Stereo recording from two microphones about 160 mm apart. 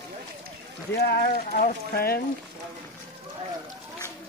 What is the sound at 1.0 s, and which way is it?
Speech, 70° left (ahead or behind).